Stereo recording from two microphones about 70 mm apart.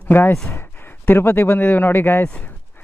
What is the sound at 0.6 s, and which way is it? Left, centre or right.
A man's voice, left.